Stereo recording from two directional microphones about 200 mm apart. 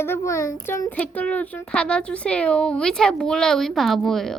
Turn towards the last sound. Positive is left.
turn(degrees=0)  # may be behind; listen again after turning